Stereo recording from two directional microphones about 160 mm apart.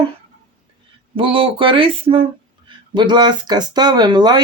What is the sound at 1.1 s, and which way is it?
Speech, 35° right (ahead or behind).